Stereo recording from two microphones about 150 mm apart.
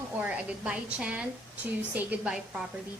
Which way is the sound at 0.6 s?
5° right (ahead or behind).